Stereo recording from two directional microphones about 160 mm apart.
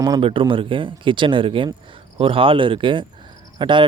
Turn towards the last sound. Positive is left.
turn(degrees=-30)  # may be behind; listen again after turning